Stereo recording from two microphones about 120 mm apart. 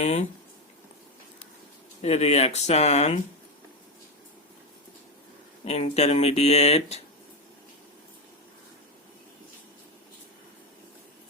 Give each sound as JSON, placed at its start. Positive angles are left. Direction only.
{"t": 0.0, "sound": "speech", "side_deg": 70}
{"t": 2.0, "sound": "speech", "side_deg": 60}
{"t": 5.6, "sound": "speech", "side_deg": 60}